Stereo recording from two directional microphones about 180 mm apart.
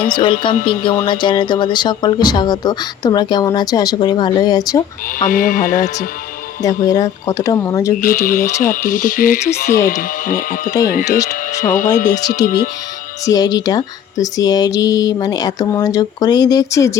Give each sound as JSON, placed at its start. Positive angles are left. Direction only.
{"t": 0.1, "sound": "a woman's voice", "side_deg": 30}
{"t": 5.2, "sound": "speech", "side_deg": 50}
{"t": 6.6, "sound": "a woman's voice", "side_deg": 20}
{"t": 8.0, "sound": "speech", "side_deg": 50}
{"t": 12.2, "sound": "speech", "side_deg": 65}
{"t": 13.2, "sound": "a woman's voice", "side_deg": 20}